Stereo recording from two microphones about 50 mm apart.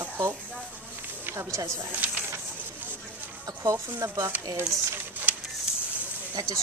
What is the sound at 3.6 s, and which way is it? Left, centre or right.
Speech, right.